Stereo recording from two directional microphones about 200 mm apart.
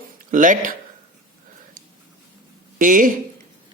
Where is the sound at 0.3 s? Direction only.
40° right (ahead or behind).